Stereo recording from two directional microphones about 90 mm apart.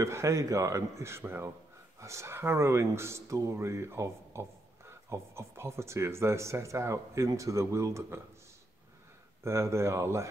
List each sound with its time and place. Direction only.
0.0 s speech: 35° right (ahead or behind)
9.4 s speech: 30° right (ahead or behind)